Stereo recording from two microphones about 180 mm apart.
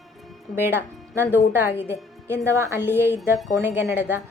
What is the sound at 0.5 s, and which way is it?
A woman's voice, 15° right (ahead or behind).